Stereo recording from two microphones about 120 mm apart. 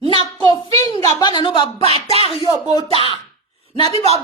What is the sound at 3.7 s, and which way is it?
Speech, 45° left (ahead or behind).